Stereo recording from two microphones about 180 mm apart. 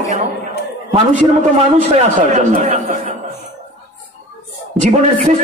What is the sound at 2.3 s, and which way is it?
Speech, 45° right (ahead or behind).